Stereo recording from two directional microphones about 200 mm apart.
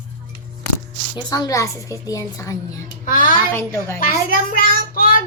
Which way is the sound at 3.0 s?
40° left (ahead or behind).